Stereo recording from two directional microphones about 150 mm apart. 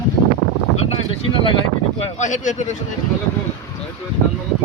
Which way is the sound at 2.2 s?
55° left (ahead or behind).